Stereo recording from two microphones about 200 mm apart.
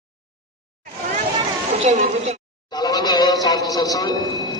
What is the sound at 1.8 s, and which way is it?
Speech, 35° right (ahead or behind).